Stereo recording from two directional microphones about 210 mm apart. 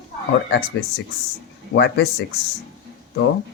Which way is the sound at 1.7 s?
55° left (ahead or behind).